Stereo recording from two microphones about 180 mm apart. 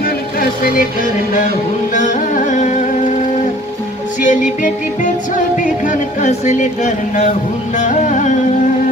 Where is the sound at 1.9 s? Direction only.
45° left (ahead or behind).